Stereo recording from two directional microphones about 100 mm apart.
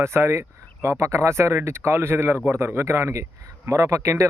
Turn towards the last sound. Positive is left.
turn(degrees=-30)  # may be behind; listen again after turning